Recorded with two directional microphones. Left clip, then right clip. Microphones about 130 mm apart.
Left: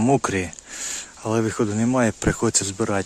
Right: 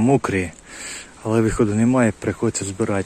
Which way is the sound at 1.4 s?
Centre (ahead or behind).